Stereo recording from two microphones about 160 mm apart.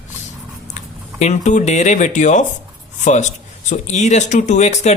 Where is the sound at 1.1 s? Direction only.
45° left (ahead or behind).